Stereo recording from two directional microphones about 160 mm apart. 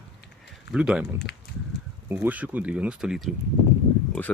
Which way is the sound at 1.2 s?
90° left.